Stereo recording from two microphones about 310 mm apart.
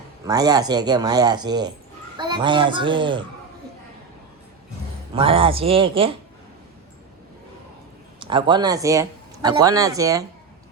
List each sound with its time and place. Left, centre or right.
0.3 s speech: centre
5.1 s speech: centre
8.2 s speech: centre